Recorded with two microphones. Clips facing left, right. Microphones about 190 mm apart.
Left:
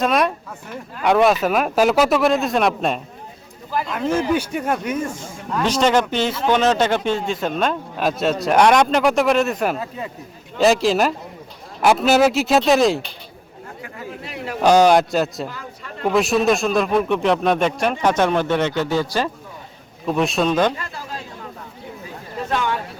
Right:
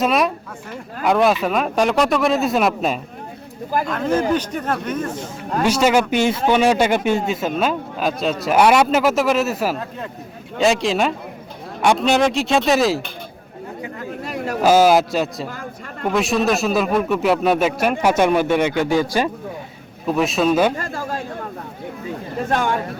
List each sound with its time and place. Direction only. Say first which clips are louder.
0.0 s a man's voice: even; centre (ahead or behind)
5.6 s a man's voice: right 1 dB; 10° right (ahead or behind)
14.3 s speech: right 5 dB; 45° right (ahead or behind)
14.6 s a man's voice: even; 5° right (ahead or behind)
15.4 s a sound: right 2 dB; 50° right (ahead or behind)
16.1 s a man's voice: left 1 dB; centre (ahead or behind)
20.1 s a man's voice: right 1 dB; centre (ahead or behind)
20.7 s chatter: right 6 dB; 45° right (ahead or behind)
22.4 s a sound: right 2 dB; 50° right (ahead or behind)